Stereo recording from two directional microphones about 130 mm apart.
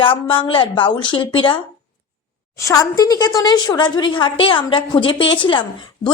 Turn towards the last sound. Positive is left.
turn(degrees=40)  # may be behind; listen again after turning